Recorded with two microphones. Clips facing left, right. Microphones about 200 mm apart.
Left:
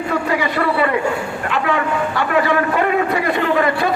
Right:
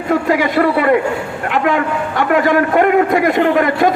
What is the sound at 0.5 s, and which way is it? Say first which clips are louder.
Speech: right 6 dB; 55° right (ahead or behind).